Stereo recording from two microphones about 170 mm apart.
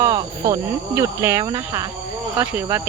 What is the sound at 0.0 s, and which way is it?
Speech, 20° right (ahead or behind).